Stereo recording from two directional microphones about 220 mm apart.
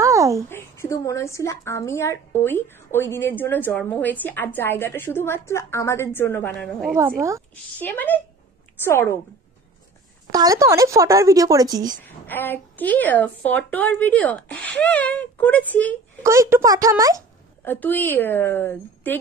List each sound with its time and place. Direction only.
0.0 s a sound: 15° right (ahead or behind)
0.5 s speech: 10° left (ahead or behind)
7.0 s speech: 15° right (ahead or behind)
7.8 s speech: 10° left (ahead or behind)
10.3 s speech: 15° right (ahead or behind)
12.3 s speech: 10° left (ahead or behind)
16.2 s speech: 15° right (ahead or behind)
17.6 s speech: 10° left (ahead or behind)